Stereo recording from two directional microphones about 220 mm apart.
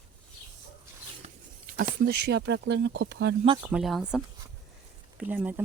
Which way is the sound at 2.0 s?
50° right (ahead or behind).